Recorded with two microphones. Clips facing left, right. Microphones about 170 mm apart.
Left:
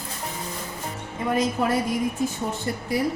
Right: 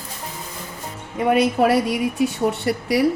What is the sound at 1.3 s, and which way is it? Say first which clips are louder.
Speech: right 6 dB; 70° right (ahead or behind).